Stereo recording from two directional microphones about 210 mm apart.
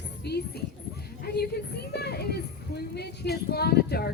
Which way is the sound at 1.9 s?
50° left (ahead or behind).